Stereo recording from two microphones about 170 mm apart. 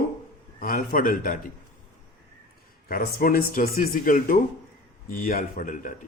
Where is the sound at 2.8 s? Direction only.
60° left (ahead or behind).